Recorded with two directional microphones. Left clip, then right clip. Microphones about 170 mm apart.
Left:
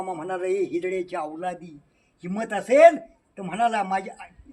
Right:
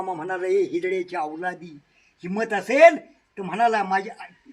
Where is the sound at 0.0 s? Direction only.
30° left (ahead or behind).